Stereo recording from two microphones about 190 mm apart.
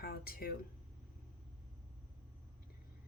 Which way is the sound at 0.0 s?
50° left (ahead or behind).